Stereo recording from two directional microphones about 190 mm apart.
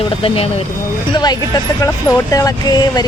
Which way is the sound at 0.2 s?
30° left (ahead or behind).